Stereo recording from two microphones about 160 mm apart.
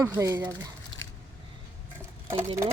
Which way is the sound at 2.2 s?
15° right (ahead or behind).